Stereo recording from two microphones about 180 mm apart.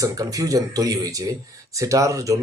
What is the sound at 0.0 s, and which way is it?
Speech, 20° right (ahead or behind).